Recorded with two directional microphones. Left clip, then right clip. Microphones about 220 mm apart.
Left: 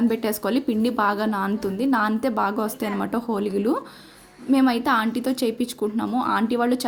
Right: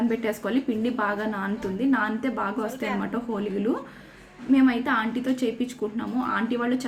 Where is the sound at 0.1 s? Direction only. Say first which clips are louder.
Left 3 dB; 45° left (ahead or behind).